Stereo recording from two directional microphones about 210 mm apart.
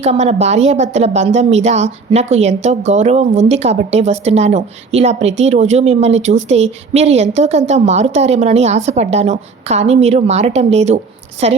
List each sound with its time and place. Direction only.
0.0 s a woman's voice: 30° right (ahead or behind)